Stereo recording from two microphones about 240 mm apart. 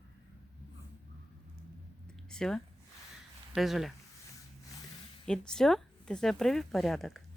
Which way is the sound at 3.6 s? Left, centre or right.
Centre.